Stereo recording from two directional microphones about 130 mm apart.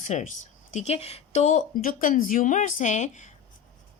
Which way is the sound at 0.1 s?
70° left (ahead or behind).